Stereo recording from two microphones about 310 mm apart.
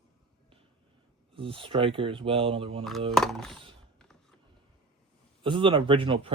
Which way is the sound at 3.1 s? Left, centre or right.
Centre.